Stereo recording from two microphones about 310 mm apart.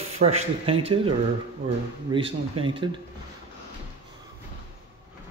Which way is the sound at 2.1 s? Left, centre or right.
Centre.